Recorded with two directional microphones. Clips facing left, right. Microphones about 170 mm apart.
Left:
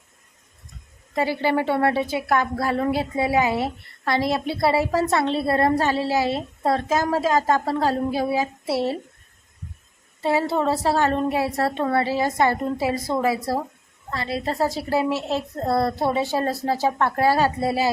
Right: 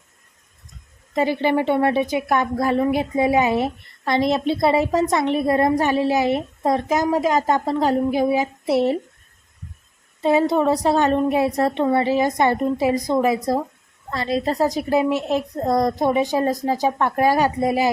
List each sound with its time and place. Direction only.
1.1 s a woman's voice: 20° right (ahead or behind)
10.2 s a woman's voice: 20° right (ahead or behind)